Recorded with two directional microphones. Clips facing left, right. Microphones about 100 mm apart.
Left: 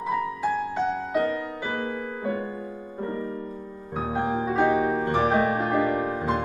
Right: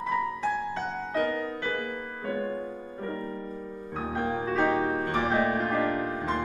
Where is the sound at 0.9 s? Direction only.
15° left (ahead or behind).